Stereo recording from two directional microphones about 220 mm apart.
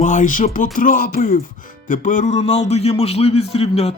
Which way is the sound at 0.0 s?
35° left (ahead or behind).